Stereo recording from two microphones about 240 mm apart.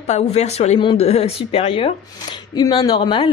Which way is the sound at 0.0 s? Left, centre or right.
Left.